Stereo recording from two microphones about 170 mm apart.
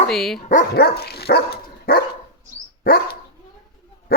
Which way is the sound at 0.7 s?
70° left (ahead or behind).